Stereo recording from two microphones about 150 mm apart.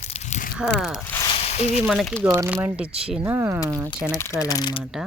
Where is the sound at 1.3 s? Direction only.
45° left (ahead or behind).